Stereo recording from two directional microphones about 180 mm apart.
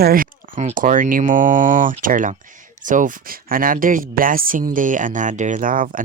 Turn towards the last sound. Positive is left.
turn(degrees=-50)  # may be behind; listen again after turning